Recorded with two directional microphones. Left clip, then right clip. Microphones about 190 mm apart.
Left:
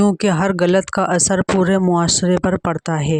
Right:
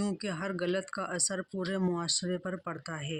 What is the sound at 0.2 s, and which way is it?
Speech, 60° left (ahead or behind).